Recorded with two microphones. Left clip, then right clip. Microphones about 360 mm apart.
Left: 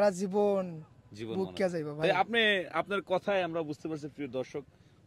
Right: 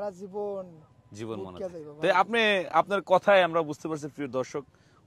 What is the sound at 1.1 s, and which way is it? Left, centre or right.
Speech, centre.